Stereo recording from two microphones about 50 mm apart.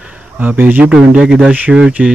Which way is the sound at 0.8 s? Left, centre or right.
Centre.